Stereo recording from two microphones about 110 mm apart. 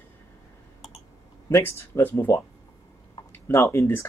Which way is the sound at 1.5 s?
25° left (ahead or behind).